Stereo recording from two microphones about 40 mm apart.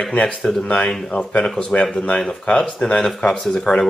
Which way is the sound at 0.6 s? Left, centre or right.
Left.